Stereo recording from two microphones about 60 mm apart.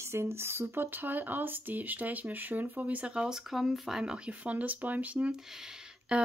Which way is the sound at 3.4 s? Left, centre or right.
Centre.